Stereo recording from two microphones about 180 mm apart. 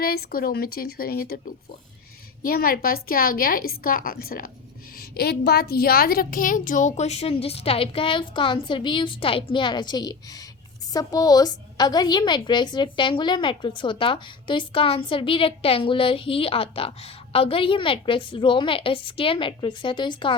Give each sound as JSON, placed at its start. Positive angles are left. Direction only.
{"t": 0.0, "sound": "a woman's voice", "side_deg": 55}